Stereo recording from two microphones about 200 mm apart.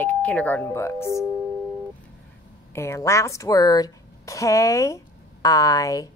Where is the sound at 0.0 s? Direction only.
5° left (ahead or behind).